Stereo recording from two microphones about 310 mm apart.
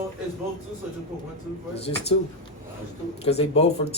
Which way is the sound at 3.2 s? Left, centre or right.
Centre.